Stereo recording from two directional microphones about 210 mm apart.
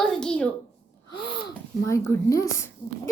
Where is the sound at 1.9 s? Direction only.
15° left (ahead or behind).